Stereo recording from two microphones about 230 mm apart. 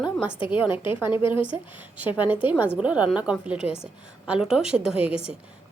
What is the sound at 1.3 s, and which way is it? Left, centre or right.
Speech, left.